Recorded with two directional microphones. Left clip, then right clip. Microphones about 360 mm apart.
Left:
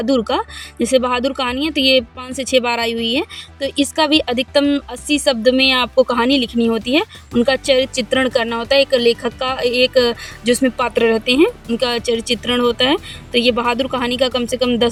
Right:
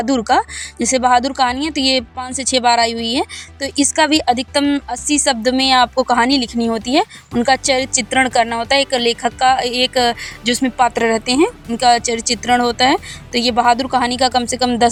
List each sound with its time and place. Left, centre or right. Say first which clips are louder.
0.1 s speech: right 3 dB; right